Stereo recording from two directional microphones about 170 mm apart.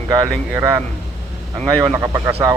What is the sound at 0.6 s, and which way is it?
Speech, 20° right (ahead or behind).